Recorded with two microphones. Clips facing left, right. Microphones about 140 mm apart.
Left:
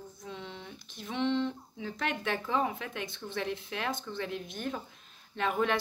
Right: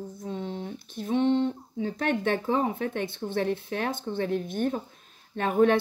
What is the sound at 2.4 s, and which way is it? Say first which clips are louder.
Speech: right 5 dB; 40° right (ahead or behind).